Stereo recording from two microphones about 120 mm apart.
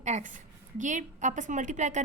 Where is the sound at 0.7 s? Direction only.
90° right.